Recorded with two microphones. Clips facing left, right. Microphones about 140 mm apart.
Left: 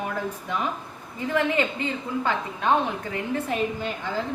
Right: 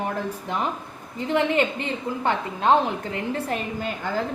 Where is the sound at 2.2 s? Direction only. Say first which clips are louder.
Right 4 dB; 30° right (ahead or behind).